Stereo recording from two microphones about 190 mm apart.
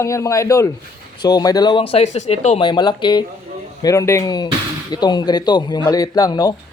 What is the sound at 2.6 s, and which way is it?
Speech, 25° left (ahead or behind).